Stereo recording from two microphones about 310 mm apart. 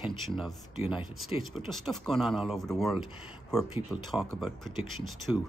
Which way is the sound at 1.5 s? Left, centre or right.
Centre.